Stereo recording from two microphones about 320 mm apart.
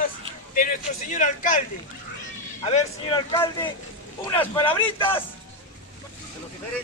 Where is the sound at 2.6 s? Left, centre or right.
Centre.